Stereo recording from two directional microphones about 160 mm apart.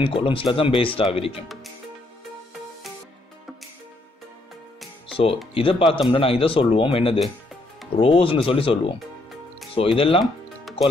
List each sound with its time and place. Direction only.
0.0 s speech: 35° left (ahead or behind)
5.0 s music: 35° left (ahead or behind)
5.5 s speech: 35° left (ahead or behind)
9.9 s speech: 35° left (ahead or behind)